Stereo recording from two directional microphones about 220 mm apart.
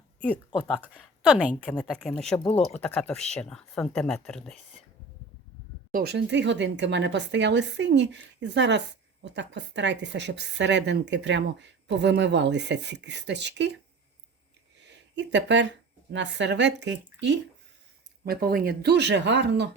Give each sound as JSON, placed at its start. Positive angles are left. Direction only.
{"t": 0.5, "sound": "speech", "side_deg": 0}
{"t": 5.9, "sound": "speech", "side_deg": -45}
{"t": 14.8, "sound": "speech", "side_deg": -55}
{"t": 18.3, "sound": "speech", "side_deg": -45}